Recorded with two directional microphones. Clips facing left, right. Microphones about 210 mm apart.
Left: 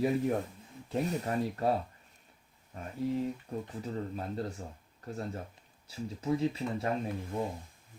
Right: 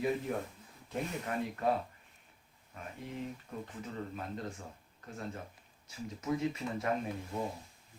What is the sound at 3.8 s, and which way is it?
Speech, 35° left (ahead or behind).